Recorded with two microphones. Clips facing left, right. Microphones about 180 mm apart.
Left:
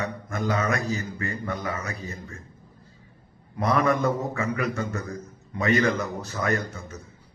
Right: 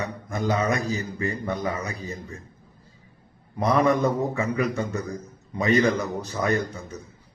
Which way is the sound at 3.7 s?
15° right (ahead or behind).